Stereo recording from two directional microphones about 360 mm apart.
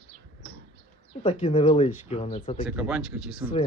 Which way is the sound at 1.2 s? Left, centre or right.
Centre.